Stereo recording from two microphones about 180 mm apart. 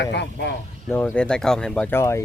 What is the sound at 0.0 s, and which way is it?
Speech, 70° left (ahead or behind).